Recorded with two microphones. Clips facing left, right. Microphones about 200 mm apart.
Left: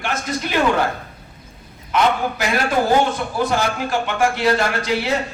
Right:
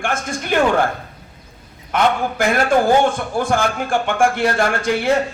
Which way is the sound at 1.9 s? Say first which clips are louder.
Right 1 dB; 50° right (ahead or behind).